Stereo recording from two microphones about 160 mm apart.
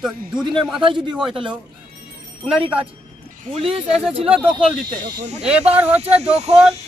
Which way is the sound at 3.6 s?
35° right (ahead or behind).